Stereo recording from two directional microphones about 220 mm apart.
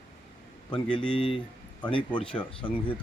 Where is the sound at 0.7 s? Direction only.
25° left (ahead or behind).